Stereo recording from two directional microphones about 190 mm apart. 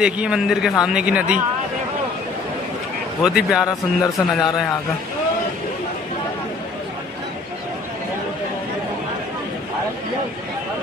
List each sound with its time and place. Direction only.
0.0 s a man's voice: 5° right (ahead or behind)
3.3 s a man's voice: 5° right (ahead or behind)
3.6 s a man's voice: 20° left (ahead or behind)